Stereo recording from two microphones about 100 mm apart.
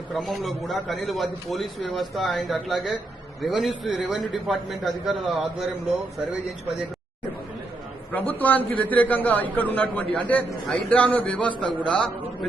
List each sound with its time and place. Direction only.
0.1 s a man's voice: centre (ahead or behind)
8.3 s a man's voice: 15° left (ahead or behind)